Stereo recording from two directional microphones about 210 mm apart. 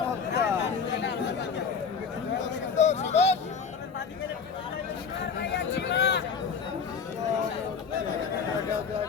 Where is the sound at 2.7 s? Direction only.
35° left (ahead or behind).